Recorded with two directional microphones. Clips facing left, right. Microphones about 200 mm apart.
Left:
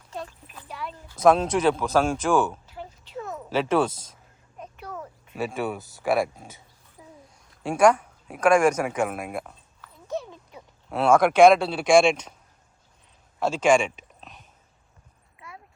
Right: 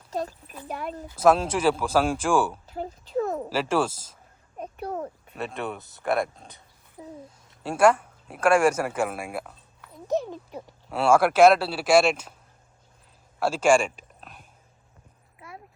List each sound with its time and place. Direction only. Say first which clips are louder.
0.1 s a child's voice: right 6 dB; 40° right (ahead or behind)
1.1 s speech: left 1 dB; 5° right (ahead or behind)
2.7 s a sound: right 9 dB; 40° right (ahead or behind)
3.5 s speech: left 5 dB; centre (ahead or behind)
4.5 s a sound: right 6 dB; 35° right (ahead or behind)
5.3 s speech: left 5 dB; centre (ahead or behind)
7.5 s speech: left 1 dB; centre (ahead or behind)
7.9 s a sound: left 2 dB; 5° left (ahead or behind)
8.4 s speech: left 1 dB; 5° right (ahead or behind)
10.1 s a sound: right 6 dB; 40° right (ahead or behind)
10.8 s speech: left 1 dB; 5° right (ahead or behind)
13.4 s speech: even; 10° right (ahead or behind)